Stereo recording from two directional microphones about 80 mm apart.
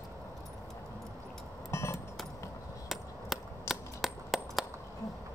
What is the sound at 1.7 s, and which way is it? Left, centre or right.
Music, left.